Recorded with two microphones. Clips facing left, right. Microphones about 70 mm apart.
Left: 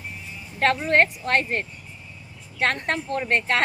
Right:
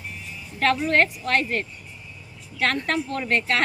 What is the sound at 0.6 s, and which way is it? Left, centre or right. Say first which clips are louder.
A woman's voice: left 1 dB; left.